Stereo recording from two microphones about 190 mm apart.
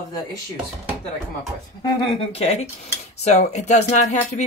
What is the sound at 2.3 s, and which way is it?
Speech, 35° left (ahead or behind).